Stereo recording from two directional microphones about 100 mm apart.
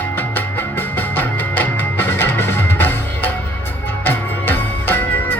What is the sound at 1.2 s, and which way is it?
Music, 20° left (ahead or behind).